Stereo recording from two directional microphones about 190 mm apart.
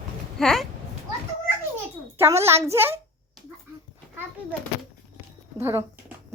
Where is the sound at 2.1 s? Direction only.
15° right (ahead or behind).